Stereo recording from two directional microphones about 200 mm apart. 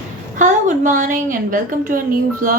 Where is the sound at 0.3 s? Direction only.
40° right (ahead or behind).